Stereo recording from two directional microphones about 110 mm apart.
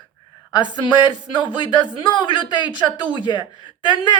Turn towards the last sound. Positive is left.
turn(degrees=45)  # may be behind; listen again after turning